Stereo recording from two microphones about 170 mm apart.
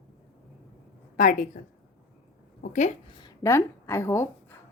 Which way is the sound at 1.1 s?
55° left (ahead or behind).